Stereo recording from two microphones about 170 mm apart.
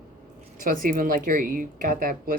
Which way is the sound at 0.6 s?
55° right (ahead or behind).